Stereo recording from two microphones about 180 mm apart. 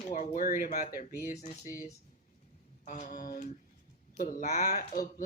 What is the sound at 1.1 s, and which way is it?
Speech, 15° right (ahead or behind).